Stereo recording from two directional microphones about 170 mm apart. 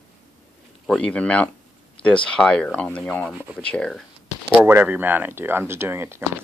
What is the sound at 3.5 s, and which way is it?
Speech, 5° left (ahead or behind).